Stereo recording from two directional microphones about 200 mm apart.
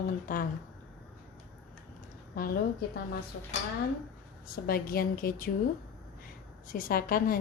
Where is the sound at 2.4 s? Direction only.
45° left (ahead or behind).